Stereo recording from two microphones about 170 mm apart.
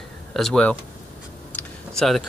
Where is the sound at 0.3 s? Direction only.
Centre (ahead or behind).